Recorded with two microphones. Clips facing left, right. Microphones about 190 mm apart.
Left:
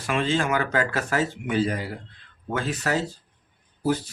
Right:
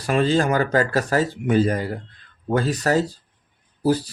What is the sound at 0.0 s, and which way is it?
Speech, 40° right (ahead or behind).